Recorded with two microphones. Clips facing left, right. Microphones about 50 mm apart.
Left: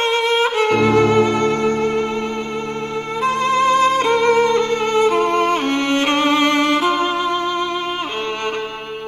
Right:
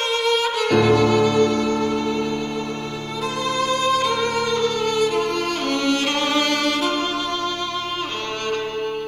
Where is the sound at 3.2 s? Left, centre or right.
Left.